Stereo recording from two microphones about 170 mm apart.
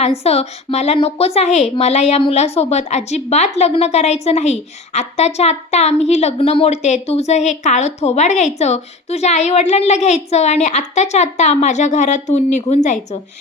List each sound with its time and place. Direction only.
0.2 s a woman's voice: 40° left (ahead or behind)